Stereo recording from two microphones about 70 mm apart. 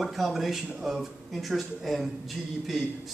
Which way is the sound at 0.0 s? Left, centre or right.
Centre.